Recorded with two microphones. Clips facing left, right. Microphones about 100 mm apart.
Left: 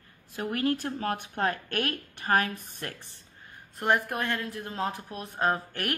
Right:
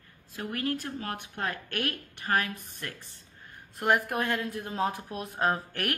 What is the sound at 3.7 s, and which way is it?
Speech, centre (ahead or behind).